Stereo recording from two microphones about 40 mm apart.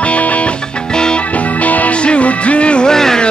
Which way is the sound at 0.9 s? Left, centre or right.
Centre.